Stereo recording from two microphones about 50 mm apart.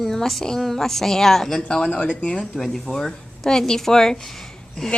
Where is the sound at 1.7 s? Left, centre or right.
Centre.